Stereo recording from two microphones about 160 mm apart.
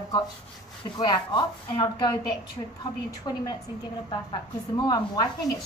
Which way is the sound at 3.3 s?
25° left (ahead or behind).